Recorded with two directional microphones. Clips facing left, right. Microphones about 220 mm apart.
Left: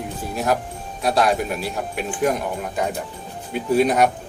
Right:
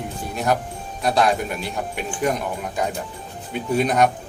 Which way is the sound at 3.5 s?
5° left (ahead or behind).